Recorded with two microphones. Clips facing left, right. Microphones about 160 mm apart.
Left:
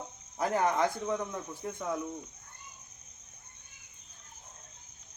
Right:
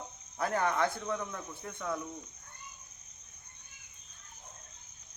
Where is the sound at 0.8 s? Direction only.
15° left (ahead or behind).